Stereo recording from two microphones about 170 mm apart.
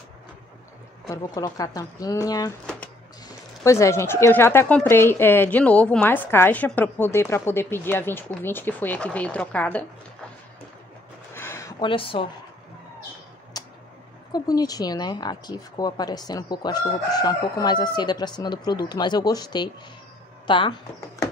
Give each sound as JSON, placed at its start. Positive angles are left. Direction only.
{"t": 1.0, "sound": "speech", "side_deg": 20}
{"t": 3.6, "sound": "speech", "side_deg": 15}
{"t": 11.3, "sound": "a sound", "side_deg": 15}
{"t": 11.8, "sound": "speech", "side_deg": 30}
{"t": 13.5, "sound": "tick", "side_deg": 25}
{"t": 14.3, "sound": "speech", "side_deg": 20}